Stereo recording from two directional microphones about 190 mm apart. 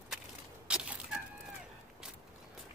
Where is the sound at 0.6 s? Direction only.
5° right (ahead or behind).